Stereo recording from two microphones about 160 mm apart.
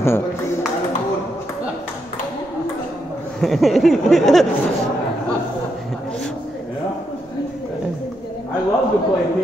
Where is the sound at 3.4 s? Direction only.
Centre (ahead or behind).